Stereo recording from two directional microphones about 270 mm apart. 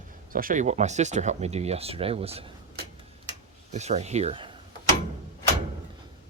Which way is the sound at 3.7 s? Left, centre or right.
Right.